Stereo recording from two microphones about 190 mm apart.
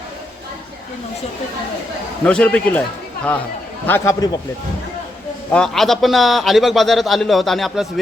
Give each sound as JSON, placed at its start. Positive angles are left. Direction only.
{"t": 2.2, "sound": "speech", "side_deg": 5}
{"t": 3.8, "sound": "speech", "side_deg": 15}
{"t": 5.5, "sound": "a man's voice", "side_deg": 5}